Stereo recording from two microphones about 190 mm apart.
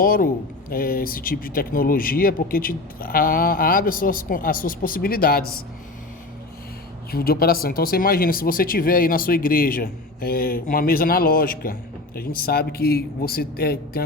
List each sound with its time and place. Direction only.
0.0 s speech: 50° left (ahead or behind)
7.1 s speech: 55° left (ahead or behind)